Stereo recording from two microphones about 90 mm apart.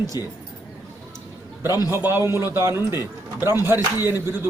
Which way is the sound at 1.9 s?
25° right (ahead or behind).